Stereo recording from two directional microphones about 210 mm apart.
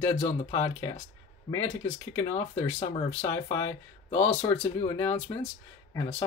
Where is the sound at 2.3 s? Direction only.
15° left (ahead or behind).